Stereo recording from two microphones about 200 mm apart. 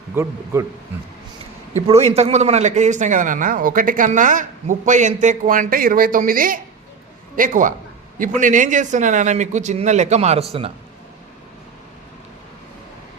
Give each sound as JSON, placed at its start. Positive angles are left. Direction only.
{"t": 0.2, "sound": "speech", "side_deg": -10}
{"t": 1.9, "sound": "a man's voice", "side_deg": -30}